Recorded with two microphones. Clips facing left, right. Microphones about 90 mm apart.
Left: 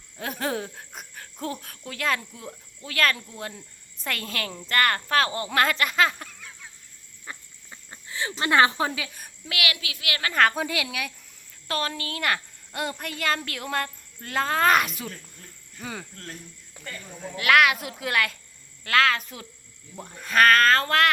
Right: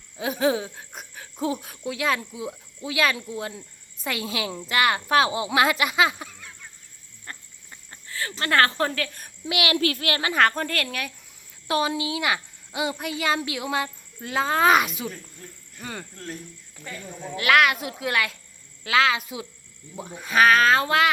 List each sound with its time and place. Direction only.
0.2 s speech: 5° right (ahead or behind)
7.3 s a sound: 15° left (ahead or behind)
9.4 s a woman's voice: 25° right (ahead or behind)
9.7 s speech: 45° right (ahead or behind)
10.3 s a woman's voice: 5° left (ahead or behind)
11.7 s a woman's voice: 15° right (ahead or behind)